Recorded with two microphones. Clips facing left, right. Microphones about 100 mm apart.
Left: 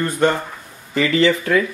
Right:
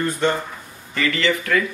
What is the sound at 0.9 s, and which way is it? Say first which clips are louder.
Speech: left 5 dB; 30° left (ahead or behind).